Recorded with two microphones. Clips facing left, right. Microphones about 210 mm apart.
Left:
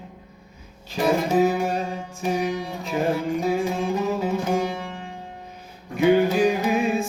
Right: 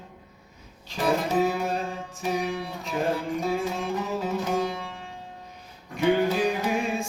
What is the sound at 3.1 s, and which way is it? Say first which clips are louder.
Music: left 4 dB; 15° left (ahead or behind).